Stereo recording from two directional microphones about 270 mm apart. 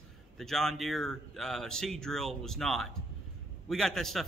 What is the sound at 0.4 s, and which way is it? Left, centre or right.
A man's voice, centre.